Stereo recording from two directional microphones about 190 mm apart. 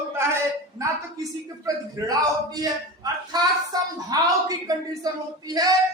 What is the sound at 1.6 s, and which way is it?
A man's voice, 20° right (ahead or behind).